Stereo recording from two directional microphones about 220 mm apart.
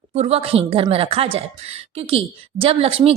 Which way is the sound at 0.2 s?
30° right (ahead or behind).